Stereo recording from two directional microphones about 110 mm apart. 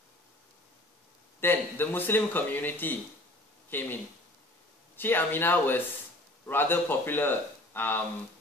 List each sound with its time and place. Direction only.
1.4 s speech: 20° left (ahead or behind)
4.9 s speech: 20° left (ahead or behind)